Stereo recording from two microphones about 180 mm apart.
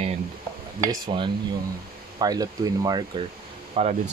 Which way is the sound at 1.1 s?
30° right (ahead or behind).